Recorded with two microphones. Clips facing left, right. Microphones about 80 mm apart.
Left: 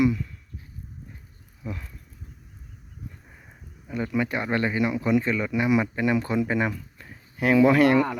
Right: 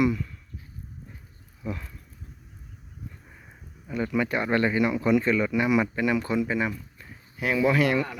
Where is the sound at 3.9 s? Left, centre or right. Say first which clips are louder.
Even; centre.